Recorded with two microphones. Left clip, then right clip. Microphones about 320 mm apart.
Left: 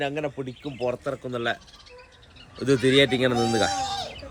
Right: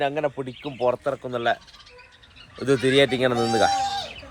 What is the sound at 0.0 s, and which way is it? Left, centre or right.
Speech, centre.